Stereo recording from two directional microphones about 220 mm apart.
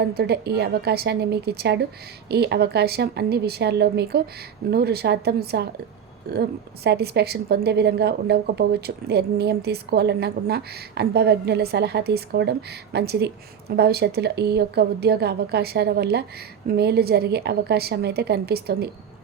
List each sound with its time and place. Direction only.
0.0 s a woman's voice: 45° right (ahead or behind)